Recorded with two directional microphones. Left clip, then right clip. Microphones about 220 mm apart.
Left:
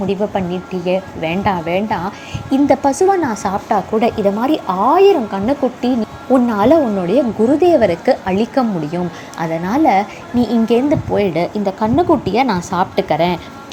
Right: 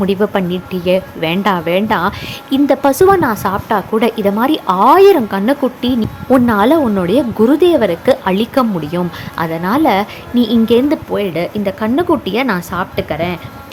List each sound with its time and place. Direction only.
0.3 s a woman's voice: 20° right (ahead or behind); by 13.4 s centre (ahead or behind)